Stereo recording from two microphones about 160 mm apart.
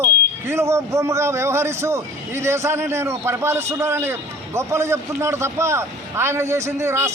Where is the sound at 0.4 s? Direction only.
15° right (ahead or behind).